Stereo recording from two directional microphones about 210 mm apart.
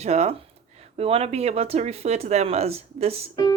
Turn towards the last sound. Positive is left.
turn(degrees=-30)  # may be behind; listen again after turning